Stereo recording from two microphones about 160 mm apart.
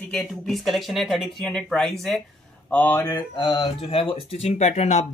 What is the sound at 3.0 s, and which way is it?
Speech, 25° left (ahead or behind).